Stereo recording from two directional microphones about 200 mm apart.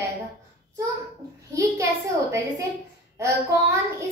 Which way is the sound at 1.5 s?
15° right (ahead or behind).